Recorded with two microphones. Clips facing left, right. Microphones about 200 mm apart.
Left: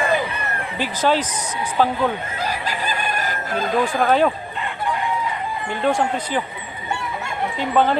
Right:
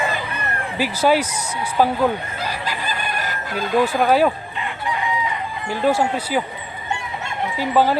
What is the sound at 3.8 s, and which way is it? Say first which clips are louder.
Speech: right 1 dB; 5° right (ahead or behind).